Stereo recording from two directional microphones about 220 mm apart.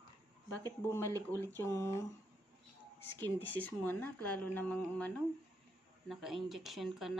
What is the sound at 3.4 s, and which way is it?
Speech, 5° left (ahead or behind).